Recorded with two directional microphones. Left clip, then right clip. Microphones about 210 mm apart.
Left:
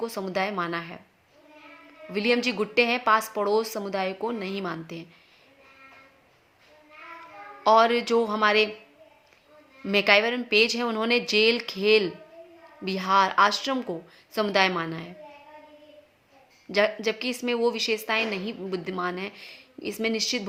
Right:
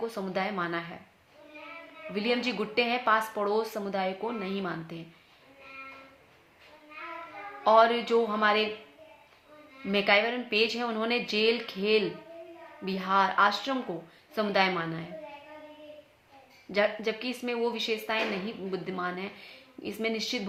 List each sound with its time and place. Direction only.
0.0 s a woman's voice: 50° left (ahead or behind)
2.1 s a woman's voice: 50° left (ahead or behind)
7.6 s a woman's voice: 45° left (ahead or behind)
9.8 s a woman's voice: 45° left (ahead or behind)
16.7 s a woman's voice: 50° left (ahead or behind)